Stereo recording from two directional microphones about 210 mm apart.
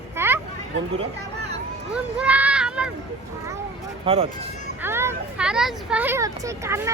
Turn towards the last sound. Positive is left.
turn(degrees=-15)  # may be behind; listen again after turning